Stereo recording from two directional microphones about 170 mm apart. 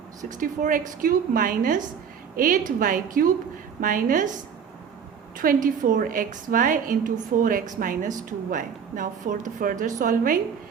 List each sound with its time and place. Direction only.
0.3 s a woman's voice: 50° right (ahead or behind)
5.4 s a woman's voice: 55° right (ahead or behind)